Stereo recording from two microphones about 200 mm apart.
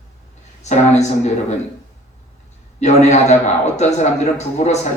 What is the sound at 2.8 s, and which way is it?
A man's voice, 35° left (ahead or behind).